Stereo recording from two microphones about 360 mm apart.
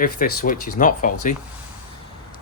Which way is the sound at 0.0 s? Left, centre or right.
Left.